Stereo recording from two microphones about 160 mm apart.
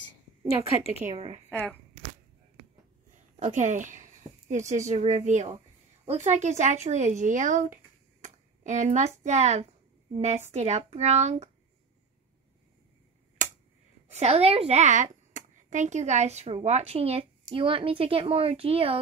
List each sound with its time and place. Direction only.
1.1 s a woman's voice: 40° right (ahead or behind)
1.5 s speech: 10° left (ahead or behind)
3.3 s speech: 45° right (ahead or behind)
14.0 s a woman's voice: 40° right (ahead or behind)